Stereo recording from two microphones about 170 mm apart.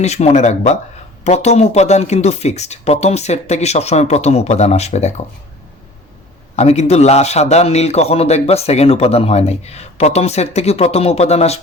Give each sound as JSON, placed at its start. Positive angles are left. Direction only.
{"t": 0.0, "sound": "a man's voice", "side_deg": 40}
{"t": 6.6, "sound": "a man's voice", "side_deg": 40}